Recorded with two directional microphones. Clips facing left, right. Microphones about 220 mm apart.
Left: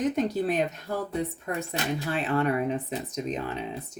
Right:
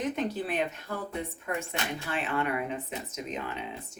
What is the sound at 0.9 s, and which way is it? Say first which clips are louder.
Speech: left 5 dB; 40° left (ahead or behind).